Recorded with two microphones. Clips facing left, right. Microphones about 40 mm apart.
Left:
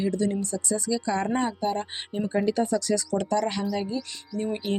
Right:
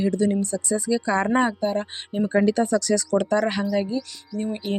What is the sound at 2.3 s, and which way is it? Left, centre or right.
Speech, right.